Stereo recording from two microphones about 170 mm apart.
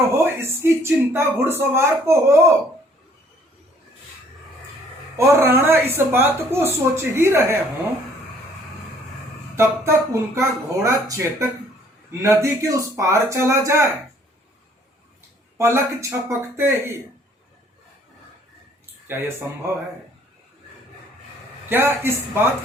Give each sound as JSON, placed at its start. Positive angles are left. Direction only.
{"t": 0.1, "sound": "speech", "side_deg": -15}
{"t": 5.1, "sound": "speech", "side_deg": -15}
{"t": 9.6, "sound": "speech", "side_deg": -15}
{"t": 15.5, "sound": "speech", "side_deg": -15}
{"t": 19.0, "sound": "speech", "side_deg": -15}
{"t": 21.7, "sound": "speech", "side_deg": -10}